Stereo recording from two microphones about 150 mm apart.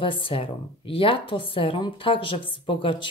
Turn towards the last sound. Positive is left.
turn(degrees=30)  # may be behind; listen again after turning